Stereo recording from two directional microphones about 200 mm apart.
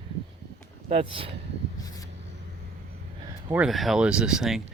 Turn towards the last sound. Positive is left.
turn(degrees=-5)  # may be behind; listen again after turning